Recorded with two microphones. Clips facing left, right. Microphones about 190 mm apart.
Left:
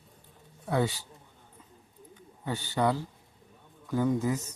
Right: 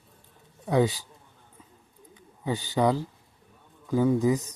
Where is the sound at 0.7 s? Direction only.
15° right (ahead or behind).